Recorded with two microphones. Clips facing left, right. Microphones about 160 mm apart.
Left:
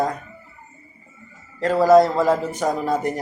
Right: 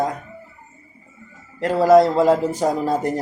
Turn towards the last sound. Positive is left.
turn(degrees=-30)  # may be behind; listen again after turning